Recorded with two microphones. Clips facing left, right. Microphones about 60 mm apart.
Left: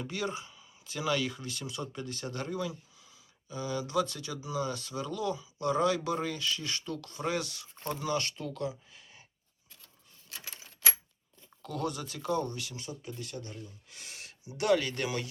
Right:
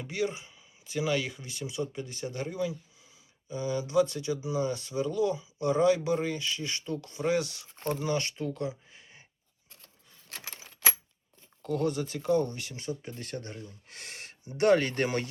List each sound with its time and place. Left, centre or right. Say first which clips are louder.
0.0 s speech: right 3 dB; centre
10.2 s keys jangling: right 2 dB; right
11.6 s speech: right 6 dB; right